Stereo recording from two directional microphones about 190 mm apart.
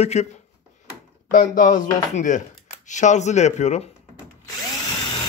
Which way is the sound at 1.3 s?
45° left (ahead or behind).